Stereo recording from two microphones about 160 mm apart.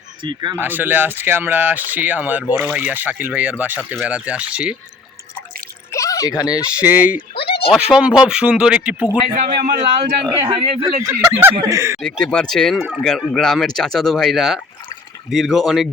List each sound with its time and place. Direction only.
0.2 s speech: 30° right (ahead or behind)
0.5 s speech: 10° right (ahead or behind)
5.9 s a sound: 20° left (ahead or behind)
6.7 s speech: 10° right (ahead or behind)
7.3 s bleat: 35° left (ahead or behind)
7.7 s speech: 5° right (ahead or behind)
9.3 s speech: 70° right (ahead or behind)
10.4 s speech: 35° right (ahead or behind)
11.0 s speech: 10° right (ahead or behind)
11.9 s speech: 5° left (ahead or behind)